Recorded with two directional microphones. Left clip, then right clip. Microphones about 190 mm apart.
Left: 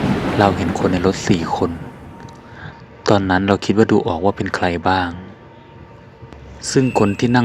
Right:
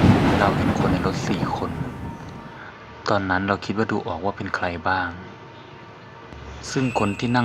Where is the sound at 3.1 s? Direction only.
55° left (ahead or behind).